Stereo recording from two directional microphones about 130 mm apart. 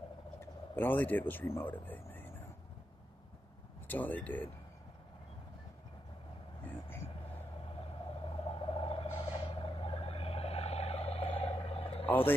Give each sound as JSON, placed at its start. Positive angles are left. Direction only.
{"t": 0.7, "sound": "speech", "side_deg": 15}
{"t": 3.8, "sound": "speech", "side_deg": 15}
{"t": 6.6, "sound": "vehicle", "side_deg": 15}
{"t": 7.8, "sound": "owl", "side_deg": 45}